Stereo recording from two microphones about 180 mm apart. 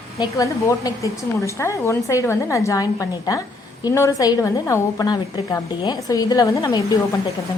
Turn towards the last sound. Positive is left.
turn(degrees=20)  # may be behind; listen again after turning